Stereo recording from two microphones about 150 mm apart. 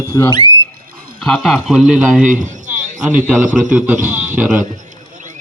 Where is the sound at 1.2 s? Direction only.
Centre (ahead or behind).